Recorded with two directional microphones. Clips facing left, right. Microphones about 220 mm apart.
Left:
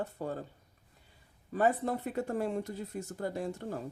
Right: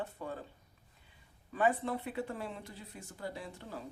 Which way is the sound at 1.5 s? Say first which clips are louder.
Left 3 dB; 40° left (ahead or behind).